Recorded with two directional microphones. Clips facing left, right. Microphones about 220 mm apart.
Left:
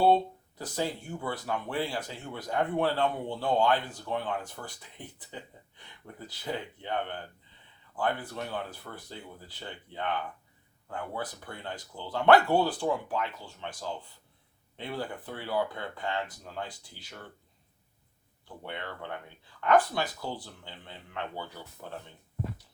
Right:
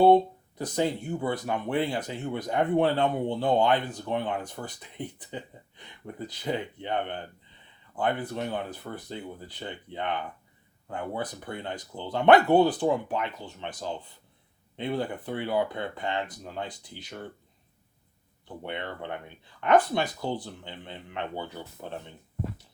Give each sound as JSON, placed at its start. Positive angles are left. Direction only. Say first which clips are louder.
{"t": 0.6, "sound": "speech", "louder": "right 5 dB", "side_deg": -20}
{"t": 18.4, "sound": "speech", "louder": "right 4 dB", "side_deg": -20}